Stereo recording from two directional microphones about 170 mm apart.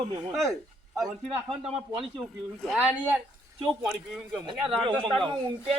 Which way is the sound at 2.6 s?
5° right (ahead or behind).